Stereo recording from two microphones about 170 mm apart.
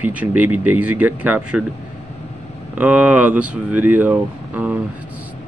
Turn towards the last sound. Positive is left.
turn(degrees=-10)  # may be behind; listen again after turning